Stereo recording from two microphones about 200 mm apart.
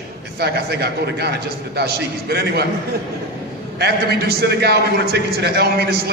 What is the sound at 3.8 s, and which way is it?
A man's voice, 55° right (ahead or behind).